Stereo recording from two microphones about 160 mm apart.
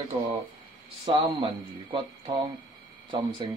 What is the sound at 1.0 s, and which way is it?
A man's voice, 35° right (ahead or behind).